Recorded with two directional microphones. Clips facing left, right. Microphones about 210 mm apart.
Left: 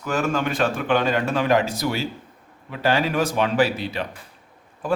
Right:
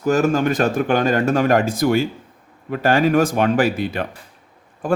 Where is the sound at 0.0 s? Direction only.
40° right (ahead or behind).